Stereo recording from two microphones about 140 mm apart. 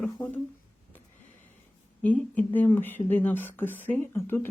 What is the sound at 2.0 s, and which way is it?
Speech, 10° left (ahead or behind).